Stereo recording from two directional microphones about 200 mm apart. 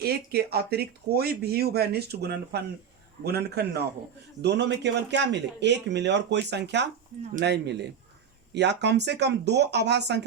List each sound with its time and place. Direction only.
0.0 s speech: 50° right (ahead or behind)